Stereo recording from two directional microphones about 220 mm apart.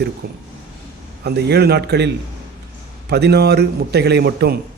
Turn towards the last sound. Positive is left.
turn(degrees=-45)  # may be behind; listen again after turning